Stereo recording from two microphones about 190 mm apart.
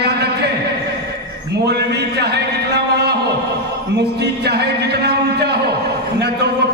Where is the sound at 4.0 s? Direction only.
60° right (ahead or behind).